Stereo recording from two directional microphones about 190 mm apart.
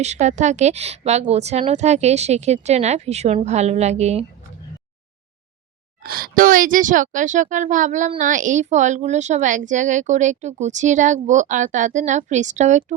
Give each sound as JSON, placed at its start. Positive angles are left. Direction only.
{"t": 0.0, "sound": "speech", "side_deg": -35}
{"t": 6.0, "sound": "speech", "side_deg": -50}